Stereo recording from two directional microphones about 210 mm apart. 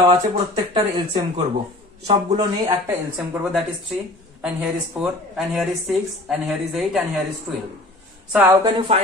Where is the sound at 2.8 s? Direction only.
10° right (ahead or behind).